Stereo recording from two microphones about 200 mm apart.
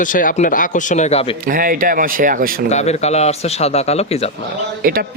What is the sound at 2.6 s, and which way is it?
Speech, 35° left (ahead or behind).